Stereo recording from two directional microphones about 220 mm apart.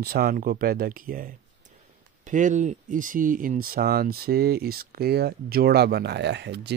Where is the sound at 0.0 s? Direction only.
45° right (ahead or behind).